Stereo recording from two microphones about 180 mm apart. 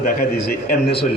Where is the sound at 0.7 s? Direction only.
65° left (ahead or behind).